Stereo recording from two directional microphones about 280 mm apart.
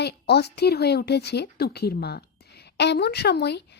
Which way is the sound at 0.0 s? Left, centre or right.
Left.